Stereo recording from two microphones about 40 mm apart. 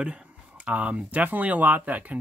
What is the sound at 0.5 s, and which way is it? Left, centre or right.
Speech, right.